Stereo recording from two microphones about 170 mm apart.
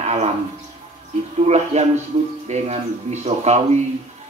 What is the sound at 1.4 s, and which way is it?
A man's voice, 40° right (ahead or behind).